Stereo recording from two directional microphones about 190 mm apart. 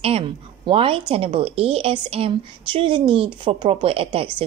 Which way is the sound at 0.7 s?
30° right (ahead or behind).